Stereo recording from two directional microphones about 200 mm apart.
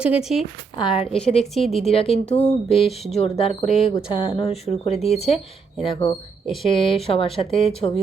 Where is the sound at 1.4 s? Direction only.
Centre (ahead or behind).